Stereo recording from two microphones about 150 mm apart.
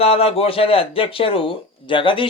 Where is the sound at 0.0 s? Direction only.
40° left (ahead or behind).